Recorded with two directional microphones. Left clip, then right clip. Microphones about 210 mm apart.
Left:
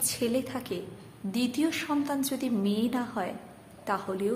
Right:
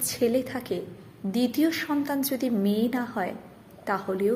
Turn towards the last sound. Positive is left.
turn(degrees=-10)  # may be behind; listen again after turning